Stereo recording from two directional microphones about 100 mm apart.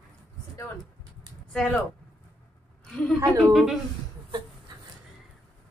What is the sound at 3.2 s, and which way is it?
Speech, 35° right (ahead or behind).